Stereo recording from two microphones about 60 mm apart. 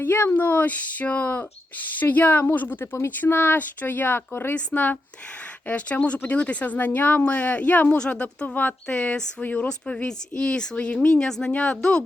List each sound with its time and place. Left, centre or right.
0.0 s speech: left
0.3 s speech: left
2.8 s speech: left
7.9 s speech: centre